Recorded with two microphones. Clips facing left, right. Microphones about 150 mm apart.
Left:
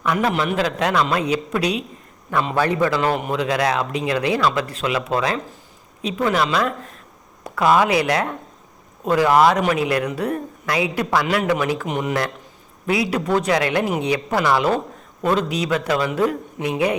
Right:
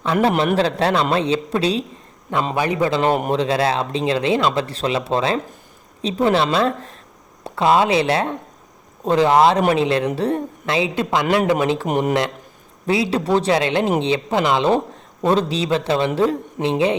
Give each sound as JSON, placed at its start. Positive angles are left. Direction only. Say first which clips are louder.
{"t": 0.0, "sound": "a man's voice", "louder": "right 3 dB", "side_deg": -30}
{"t": 2.6, "sound": "speech", "louder": "even", "side_deg": -15}
{"t": 11.9, "sound": "a man's voice", "louder": "right 4 dB", "side_deg": -45}
{"t": 12.8, "sound": "speech", "louder": "right 2 dB", "side_deg": -30}